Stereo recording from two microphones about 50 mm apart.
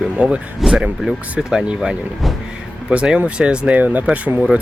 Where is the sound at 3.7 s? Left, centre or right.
Right.